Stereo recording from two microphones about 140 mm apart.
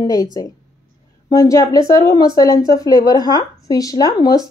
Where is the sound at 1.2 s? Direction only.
25° left (ahead or behind).